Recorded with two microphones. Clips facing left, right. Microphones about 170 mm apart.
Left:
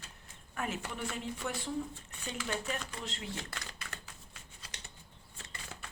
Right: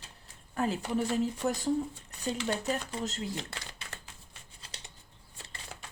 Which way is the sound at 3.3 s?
25° right (ahead or behind).